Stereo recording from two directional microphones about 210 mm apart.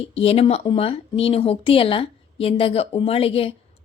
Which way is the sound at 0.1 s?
30° left (ahead or behind).